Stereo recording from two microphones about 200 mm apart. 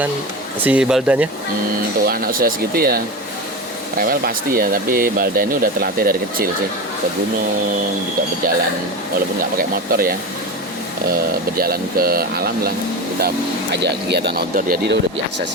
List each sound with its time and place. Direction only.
0.6 s speech: 5° right (ahead or behind)
2.0 s speech: 45° right (ahead or behind)
4.0 s speech: 45° right (ahead or behind)
9.6 s speech: 45° right (ahead or behind)
11.5 s speech: 50° right (ahead or behind)